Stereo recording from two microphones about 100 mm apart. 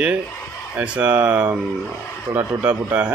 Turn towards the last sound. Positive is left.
turn(degrees=-15)  # may be behind; listen again after turning